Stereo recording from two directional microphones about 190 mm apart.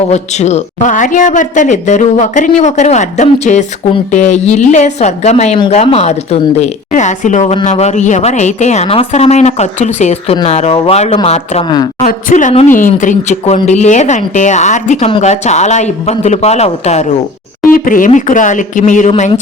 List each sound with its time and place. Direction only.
0.1 s speech: 35° left (ahead or behind)
17.7 s speech: 45° left (ahead or behind)